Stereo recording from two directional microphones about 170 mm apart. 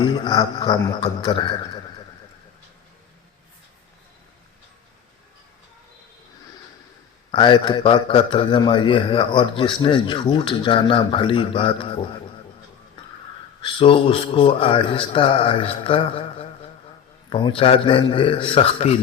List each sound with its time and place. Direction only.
0.0 s a man's voice: 25° left (ahead or behind)
7.3 s a man's voice: 30° left (ahead or behind)
13.6 s speech: 30° left (ahead or behind)